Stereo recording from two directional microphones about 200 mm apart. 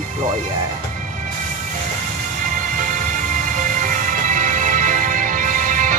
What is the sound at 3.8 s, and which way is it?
Music, 40° right (ahead or behind).